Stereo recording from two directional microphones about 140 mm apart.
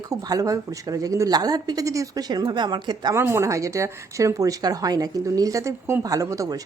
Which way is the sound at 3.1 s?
20° right (ahead or behind).